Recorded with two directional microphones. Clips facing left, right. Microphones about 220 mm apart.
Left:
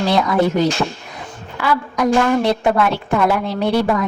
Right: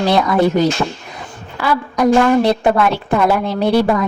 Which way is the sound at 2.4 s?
35° right (ahead or behind).